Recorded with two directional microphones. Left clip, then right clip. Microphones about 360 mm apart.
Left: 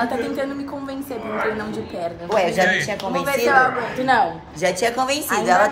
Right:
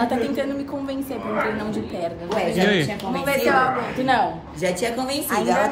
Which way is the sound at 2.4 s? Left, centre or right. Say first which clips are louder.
Left 3 dB; centre.